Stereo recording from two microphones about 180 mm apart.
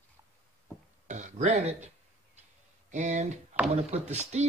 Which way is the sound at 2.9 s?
40° right (ahead or behind).